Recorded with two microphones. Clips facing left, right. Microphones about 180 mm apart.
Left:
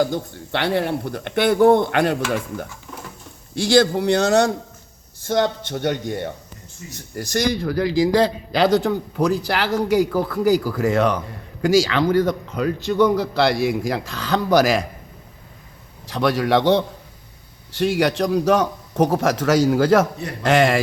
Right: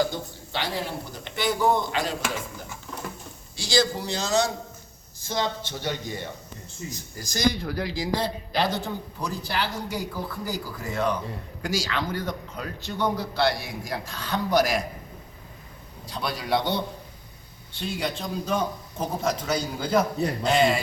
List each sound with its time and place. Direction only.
0.0 s a man's voice: 55° left (ahead or behind); by 14.8 s 90° left
16.0 s a man's voice: 90° left